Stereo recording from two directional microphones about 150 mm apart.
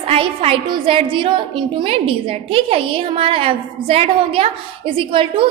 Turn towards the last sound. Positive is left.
turn(degrees=-35)  # may be behind; listen again after turning